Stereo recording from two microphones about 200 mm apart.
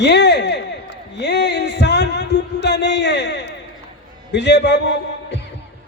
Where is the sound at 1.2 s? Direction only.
60° left (ahead or behind).